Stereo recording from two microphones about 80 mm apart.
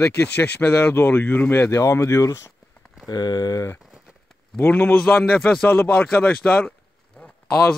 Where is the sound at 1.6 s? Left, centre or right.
Left.